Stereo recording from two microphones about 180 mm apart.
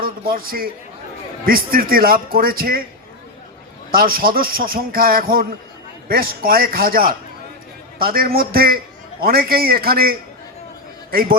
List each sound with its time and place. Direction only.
0.0 s a man's voice: 55° right (ahead or behind)
3.9 s a man's voice: 55° right (ahead or behind)